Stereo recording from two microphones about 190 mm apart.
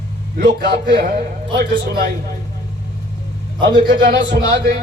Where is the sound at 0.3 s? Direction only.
55° right (ahead or behind).